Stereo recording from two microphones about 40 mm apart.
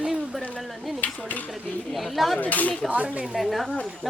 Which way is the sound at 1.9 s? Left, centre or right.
Centre.